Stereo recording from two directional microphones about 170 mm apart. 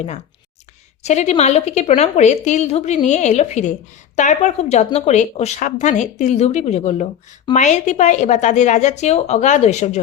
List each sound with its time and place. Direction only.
1.0 s a woman's voice: 40° left (ahead or behind)